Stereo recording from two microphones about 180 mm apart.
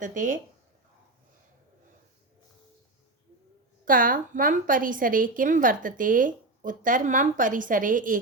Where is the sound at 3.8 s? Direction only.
50° right (ahead or behind).